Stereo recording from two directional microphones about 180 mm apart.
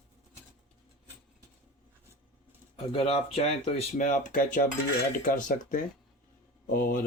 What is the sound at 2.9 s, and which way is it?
Speech, 35° left (ahead or behind).